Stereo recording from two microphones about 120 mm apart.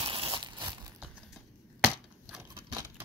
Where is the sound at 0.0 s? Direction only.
45° right (ahead or behind).